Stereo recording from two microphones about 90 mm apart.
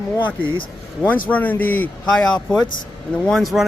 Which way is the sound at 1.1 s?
15° left (ahead or behind).